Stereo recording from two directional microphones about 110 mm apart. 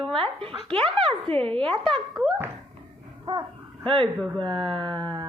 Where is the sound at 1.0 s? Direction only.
55° right (ahead or behind).